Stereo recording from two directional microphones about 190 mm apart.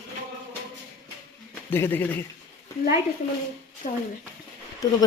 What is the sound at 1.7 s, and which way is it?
Speech, 10° left (ahead or behind).